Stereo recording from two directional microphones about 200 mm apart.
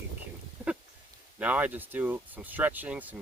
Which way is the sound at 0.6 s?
10° right (ahead or behind).